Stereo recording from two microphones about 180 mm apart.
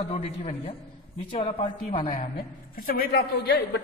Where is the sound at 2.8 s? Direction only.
55° left (ahead or behind).